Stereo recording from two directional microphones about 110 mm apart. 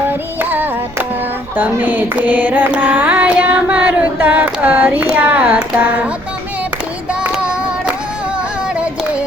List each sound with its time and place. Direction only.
0.1 s music: 15° right (ahead or behind)
1.5 s carnatic music: 15° right (ahead or behind)
7.1 s child singing: 10° right (ahead or behind)
8.7 s yodeling: 10° right (ahead or behind)